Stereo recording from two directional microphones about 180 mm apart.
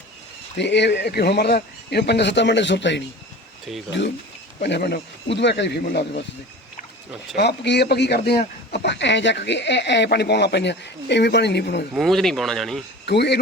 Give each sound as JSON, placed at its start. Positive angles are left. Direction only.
{"t": 0.5, "sound": "a man's voice", "side_deg": 75}
{"t": 4.6, "sound": "a man's voice", "side_deg": 65}
{"t": 7.3, "sound": "a man's voice", "side_deg": 70}
{"t": 11.9, "sound": "speech", "side_deg": 0}
{"t": 13.1, "sound": "a man's voice", "side_deg": 65}